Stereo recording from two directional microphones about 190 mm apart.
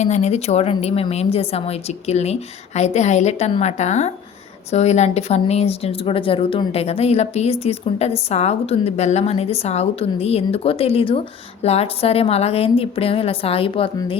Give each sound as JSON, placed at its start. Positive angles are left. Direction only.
{"t": 0.0, "sound": "a woman's voice", "side_deg": 35}